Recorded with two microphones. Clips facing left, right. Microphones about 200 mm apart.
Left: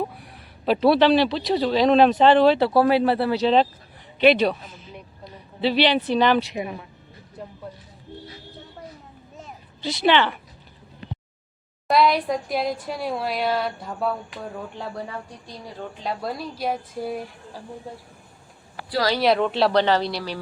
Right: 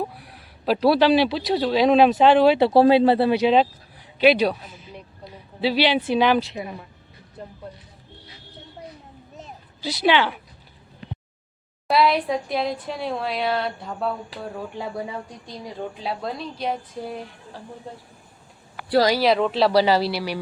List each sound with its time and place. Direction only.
0.0 s a man's voice: centre (ahead or behind)
2.6 s a woman's voice: 25° right (ahead or behind)
9.8 s a woman's voice: 5° right (ahead or behind)
11.9 s a woman's voice: centre (ahead or behind)
14.4 s speech: 10° right (ahead or behind)
16.2 s speech: 5° left (ahead or behind)
19.2 s a woman's voice: centre (ahead or behind)